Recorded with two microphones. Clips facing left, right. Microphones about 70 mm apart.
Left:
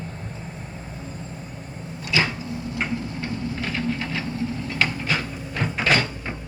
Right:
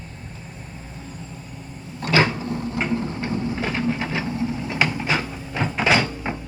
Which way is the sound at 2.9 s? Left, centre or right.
Right.